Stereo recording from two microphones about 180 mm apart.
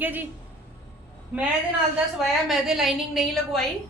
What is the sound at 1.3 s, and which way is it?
A woman's voice, 5° right (ahead or behind).